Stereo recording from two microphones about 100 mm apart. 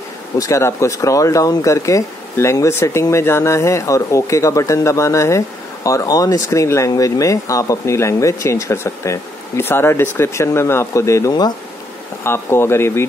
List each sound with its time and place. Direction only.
0.4 s speech: 30° left (ahead or behind)